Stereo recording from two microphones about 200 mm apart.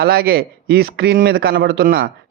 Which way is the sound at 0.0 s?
50° right (ahead or behind).